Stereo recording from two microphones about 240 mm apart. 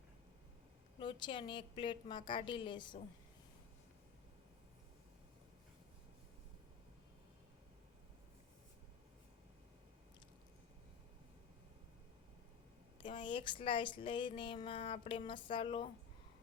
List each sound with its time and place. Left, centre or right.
0.9 s speech: centre
13.0 s speech: centre